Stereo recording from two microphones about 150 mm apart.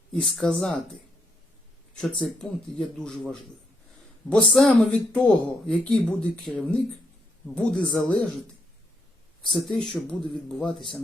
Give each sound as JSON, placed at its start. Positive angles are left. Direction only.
{"t": 0.1, "sound": "speech", "side_deg": 5}
{"t": 2.0, "sound": "speech", "side_deg": 5}
{"t": 9.5, "sound": "speech", "side_deg": 0}